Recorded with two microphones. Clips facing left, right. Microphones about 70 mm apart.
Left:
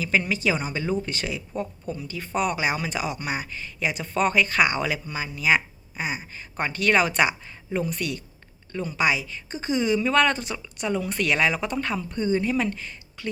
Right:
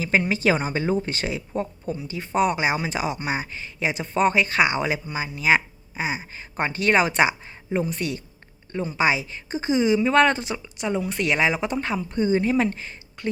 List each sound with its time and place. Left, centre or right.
0.0 s a woman's voice: right
12.4 s a woman's voice: right